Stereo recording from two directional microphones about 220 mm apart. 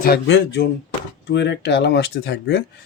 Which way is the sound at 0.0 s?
50° left (ahead or behind).